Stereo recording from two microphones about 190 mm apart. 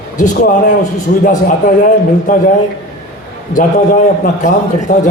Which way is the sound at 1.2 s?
45° left (ahead or behind).